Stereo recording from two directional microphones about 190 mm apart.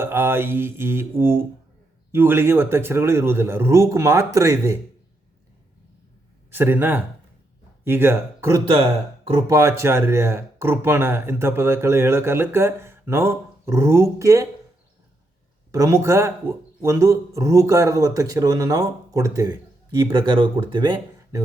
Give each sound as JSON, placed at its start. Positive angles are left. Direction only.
{"t": 0.0, "sound": "a man's voice", "side_deg": -10}
{"t": 6.5, "sound": "a man's voice", "side_deg": -10}
{"t": 15.7, "sound": "a man's voice", "side_deg": -15}